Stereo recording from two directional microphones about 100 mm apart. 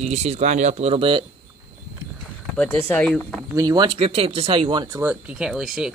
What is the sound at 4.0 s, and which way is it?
Speech, 75° right (ahead or behind).